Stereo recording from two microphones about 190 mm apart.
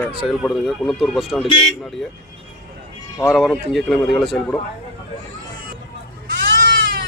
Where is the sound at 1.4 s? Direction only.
25° left (ahead or behind).